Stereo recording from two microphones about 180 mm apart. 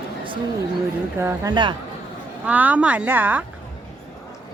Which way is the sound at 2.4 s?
10° right (ahead or behind).